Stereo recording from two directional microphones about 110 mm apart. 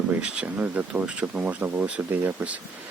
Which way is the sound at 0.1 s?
10° right (ahead or behind).